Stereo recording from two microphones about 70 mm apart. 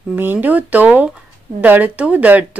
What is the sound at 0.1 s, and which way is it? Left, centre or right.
Speech, right.